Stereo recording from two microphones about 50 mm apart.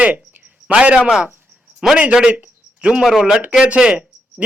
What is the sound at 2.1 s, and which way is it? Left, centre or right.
A man's voice, centre.